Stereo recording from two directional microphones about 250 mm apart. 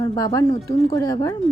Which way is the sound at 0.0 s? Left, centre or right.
Centre.